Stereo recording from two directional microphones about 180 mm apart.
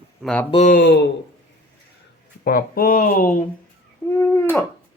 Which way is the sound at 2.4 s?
55° left (ahead or behind).